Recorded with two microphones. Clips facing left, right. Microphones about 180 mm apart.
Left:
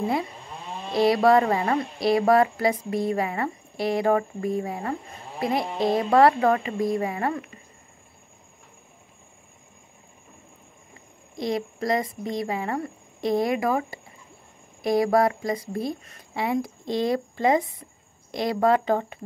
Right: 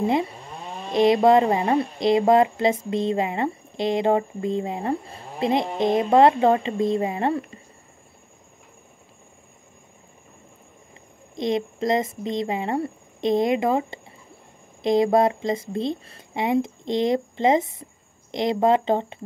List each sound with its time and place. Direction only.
0.0 s speech: 20° right (ahead or behind)
11.3 s speech: 20° right (ahead or behind)